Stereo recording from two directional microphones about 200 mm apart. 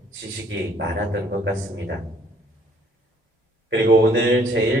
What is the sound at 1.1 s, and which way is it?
Speech, 55° right (ahead or behind).